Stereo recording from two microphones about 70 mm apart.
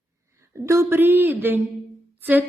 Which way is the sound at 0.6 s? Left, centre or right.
Right.